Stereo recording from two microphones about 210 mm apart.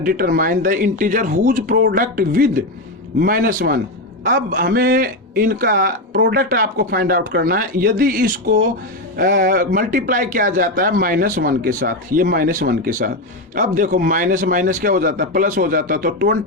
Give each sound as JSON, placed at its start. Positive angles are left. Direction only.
{"t": 0.0, "sound": "a man's voice", "side_deg": -45}